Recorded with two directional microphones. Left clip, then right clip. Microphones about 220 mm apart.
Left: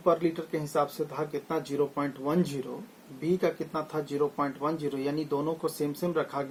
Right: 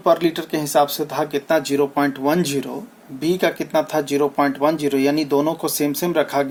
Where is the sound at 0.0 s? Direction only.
50° right (ahead or behind).